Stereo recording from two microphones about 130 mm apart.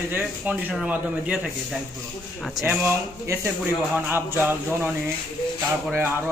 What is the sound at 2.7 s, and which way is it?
A man's voice, 15° right (ahead or behind).